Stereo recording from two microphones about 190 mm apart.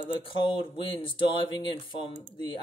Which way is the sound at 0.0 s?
25° left (ahead or behind).